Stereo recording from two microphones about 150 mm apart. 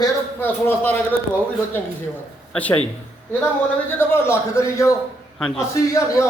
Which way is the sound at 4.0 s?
15° left (ahead or behind).